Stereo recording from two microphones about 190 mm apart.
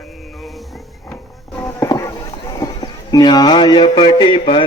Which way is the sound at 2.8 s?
20° left (ahead or behind).